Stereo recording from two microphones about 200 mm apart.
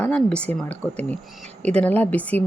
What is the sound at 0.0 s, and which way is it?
A woman's voice, 5° left (ahead or behind).